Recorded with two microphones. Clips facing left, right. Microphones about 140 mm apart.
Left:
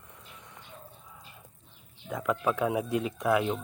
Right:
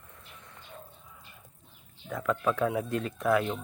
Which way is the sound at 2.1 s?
15° left (ahead or behind).